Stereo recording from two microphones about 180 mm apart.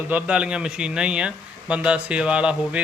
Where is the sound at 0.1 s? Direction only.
5° right (ahead or behind).